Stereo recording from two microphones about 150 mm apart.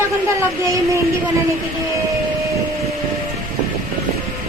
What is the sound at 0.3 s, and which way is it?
Speech, 20° right (ahead or behind).